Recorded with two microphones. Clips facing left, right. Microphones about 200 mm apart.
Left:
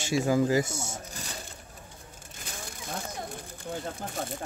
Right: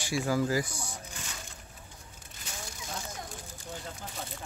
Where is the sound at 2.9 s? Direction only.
55° left (ahead or behind).